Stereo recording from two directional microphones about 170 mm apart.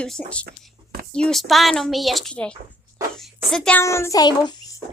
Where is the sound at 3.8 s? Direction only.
15° left (ahead or behind).